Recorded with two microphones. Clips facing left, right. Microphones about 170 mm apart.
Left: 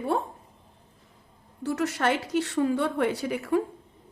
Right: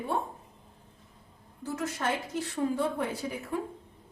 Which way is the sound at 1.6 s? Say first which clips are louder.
Left 6 dB; 80° left.